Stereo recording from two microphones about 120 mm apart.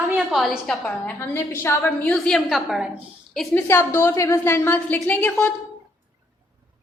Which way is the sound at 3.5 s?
20° left (ahead or behind).